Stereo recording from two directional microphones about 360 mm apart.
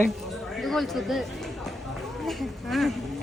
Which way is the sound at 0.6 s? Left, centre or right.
Centre.